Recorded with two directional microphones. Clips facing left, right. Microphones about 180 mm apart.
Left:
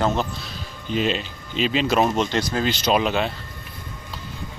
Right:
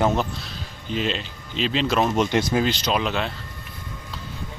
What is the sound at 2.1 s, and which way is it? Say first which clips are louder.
Speech: right 2 dB; 15° right (ahead or behind).